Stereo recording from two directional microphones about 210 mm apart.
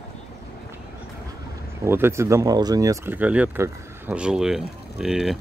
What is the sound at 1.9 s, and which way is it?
Speech, 10° right (ahead or behind).